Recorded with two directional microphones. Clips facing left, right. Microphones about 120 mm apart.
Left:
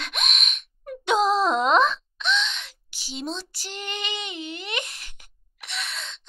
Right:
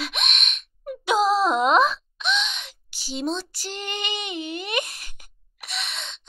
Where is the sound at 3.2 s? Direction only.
50° right (ahead or behind); by 4.2 s 30° right (ahead or behind).